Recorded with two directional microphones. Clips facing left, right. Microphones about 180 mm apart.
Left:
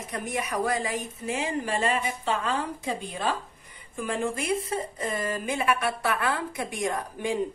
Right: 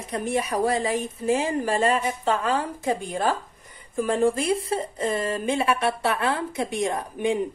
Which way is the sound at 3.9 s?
35° right (ahead or behind).